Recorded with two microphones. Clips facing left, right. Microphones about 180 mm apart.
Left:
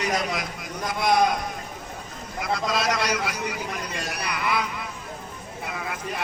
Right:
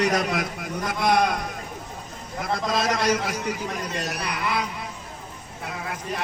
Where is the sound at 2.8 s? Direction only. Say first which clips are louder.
Right 5 dB; 45° right (ahead or behind).